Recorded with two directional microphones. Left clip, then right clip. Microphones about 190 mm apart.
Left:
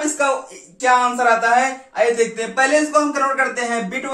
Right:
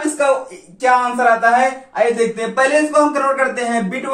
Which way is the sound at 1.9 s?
15° left (ahead or behind).